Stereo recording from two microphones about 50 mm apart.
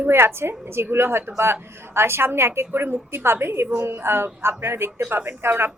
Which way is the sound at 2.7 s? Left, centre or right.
Right.